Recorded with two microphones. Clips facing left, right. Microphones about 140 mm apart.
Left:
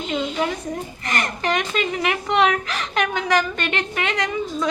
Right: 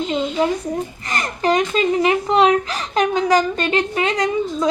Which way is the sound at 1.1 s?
35° right (ahead or behind).